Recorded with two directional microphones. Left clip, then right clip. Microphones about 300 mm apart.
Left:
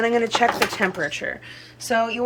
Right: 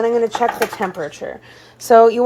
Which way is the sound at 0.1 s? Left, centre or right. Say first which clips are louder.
Right 3 dB; centre.